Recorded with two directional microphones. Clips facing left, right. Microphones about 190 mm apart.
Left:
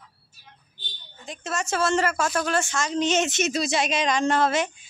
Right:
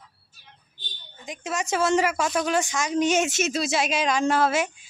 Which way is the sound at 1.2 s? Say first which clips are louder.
Right 1 dB; 15° right (ahead or behind).